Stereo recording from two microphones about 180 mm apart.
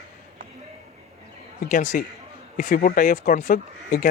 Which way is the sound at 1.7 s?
45° left (ahead or behind).